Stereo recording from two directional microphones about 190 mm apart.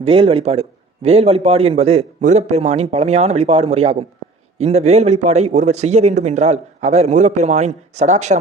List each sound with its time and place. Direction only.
0.0 s a man's voice: 30° right (ahead or behind)